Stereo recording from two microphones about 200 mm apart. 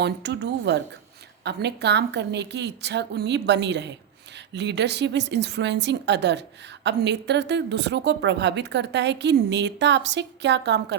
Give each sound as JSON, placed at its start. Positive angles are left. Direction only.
{"t": 0.0, "sound": "a woman's voice", "side_deg": -55}